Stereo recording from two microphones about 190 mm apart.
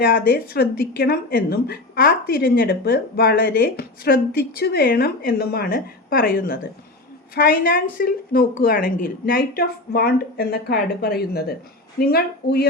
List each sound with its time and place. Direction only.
0.0 s a woman's voice: 50° left (ahead or behind)